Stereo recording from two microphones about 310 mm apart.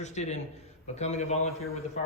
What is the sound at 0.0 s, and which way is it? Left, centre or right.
A man's voice, left.